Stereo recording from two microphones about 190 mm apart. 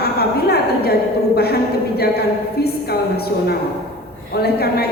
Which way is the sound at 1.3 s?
55° left (ahead or behind).